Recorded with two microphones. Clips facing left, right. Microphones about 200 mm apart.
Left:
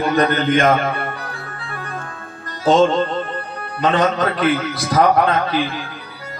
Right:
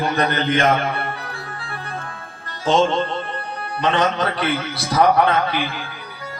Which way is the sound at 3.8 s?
40° left (ahead or behind).